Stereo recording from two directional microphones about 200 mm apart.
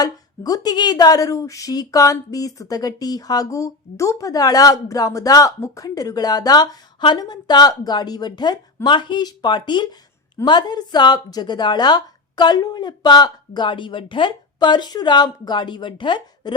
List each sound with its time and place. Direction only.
0.0 s speech: 20° left (ahead or behind)